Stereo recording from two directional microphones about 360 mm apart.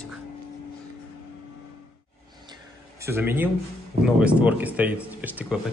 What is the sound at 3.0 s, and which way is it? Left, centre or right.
Speech, centre.